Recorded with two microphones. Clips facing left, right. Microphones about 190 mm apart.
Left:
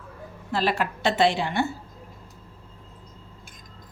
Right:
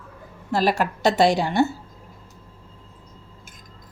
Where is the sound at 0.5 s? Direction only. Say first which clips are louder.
Right 4 dB; 40° right (ahead or behind).